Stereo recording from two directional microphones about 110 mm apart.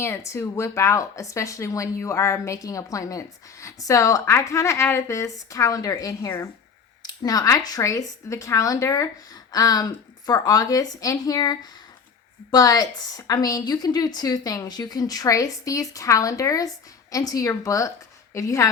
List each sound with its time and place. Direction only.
0.3 s a woman's voice: 25° left (ahead or behind)